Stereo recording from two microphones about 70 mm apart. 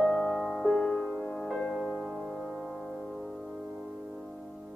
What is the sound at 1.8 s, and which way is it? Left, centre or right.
Music, centre.